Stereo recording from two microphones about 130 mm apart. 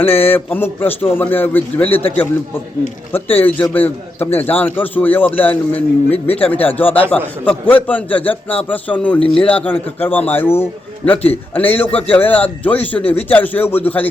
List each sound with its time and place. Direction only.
0.0 s a man's voice: 15° left (ahead or behind)
3.3 s a man's voice: 15° left (ahead or behind)
6.1 s speech: 50° left (ahead or behind)
6.5 s a man's voice: 15° left (ahead or behind)